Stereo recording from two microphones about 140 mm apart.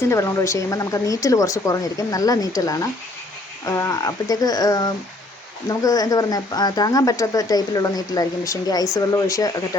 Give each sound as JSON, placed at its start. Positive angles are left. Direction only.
{"t": 0.0, "sound": "speech", "side_deg": 20}